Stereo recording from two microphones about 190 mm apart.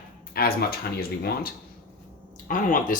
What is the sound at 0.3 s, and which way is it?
Speech, 50° left (ahead or behind).